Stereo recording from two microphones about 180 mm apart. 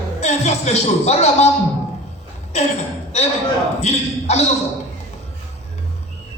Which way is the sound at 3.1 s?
40° left (ahead or behind).